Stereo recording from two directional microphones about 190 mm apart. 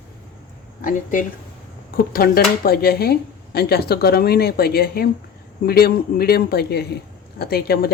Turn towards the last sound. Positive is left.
turn(degrees=55)  # may be behind; listen again after turning